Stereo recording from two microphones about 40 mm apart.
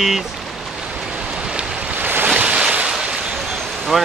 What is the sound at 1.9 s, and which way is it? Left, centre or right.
Waves, right.